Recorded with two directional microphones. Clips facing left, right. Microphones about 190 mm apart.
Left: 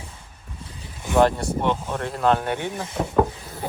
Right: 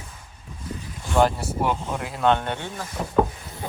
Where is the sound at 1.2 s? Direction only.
Centre (ahead or behind); by 3.1 s 25° left (ahead or behind).